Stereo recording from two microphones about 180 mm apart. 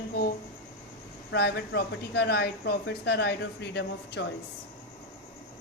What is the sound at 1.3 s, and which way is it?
A woman's voice, 70° left (ahead or behind).